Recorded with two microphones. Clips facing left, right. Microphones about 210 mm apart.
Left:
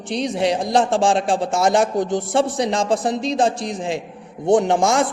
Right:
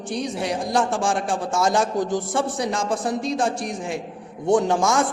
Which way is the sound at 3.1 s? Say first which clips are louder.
Left 2 dB; 90° left.